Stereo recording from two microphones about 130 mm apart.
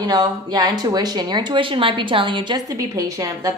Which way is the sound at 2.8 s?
25° right (ahead or behind).